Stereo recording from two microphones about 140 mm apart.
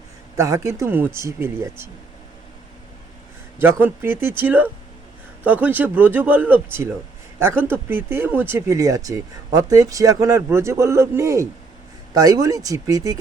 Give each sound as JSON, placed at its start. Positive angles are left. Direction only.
{"t": 0.3, "sound": "speech", "side_deg": -20}
{"t": 3.6, "sound": "speech", "side_deg": -15}